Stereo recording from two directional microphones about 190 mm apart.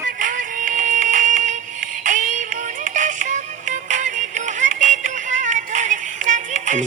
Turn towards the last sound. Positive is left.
turn(degrees=-40)  # may be behind; listen again after turning